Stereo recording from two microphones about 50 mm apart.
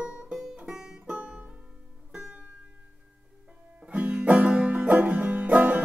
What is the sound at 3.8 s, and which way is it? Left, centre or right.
Music, centre.